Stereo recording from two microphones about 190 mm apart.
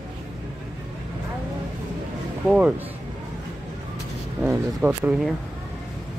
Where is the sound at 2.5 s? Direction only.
5° right (ahead or behind).